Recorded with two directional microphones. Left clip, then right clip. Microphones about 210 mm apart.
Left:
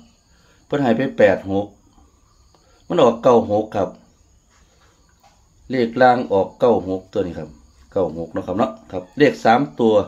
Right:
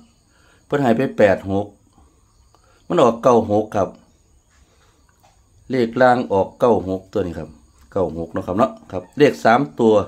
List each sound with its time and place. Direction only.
0.7 s speech: 30° right (ahead or behind)
2.9 s speech: 30° right (ahead or behind)
5.7 s speech: 30° right (ahead or behind)